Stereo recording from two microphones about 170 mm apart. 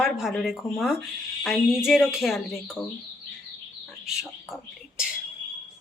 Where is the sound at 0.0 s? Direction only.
Centre (ahead or behind).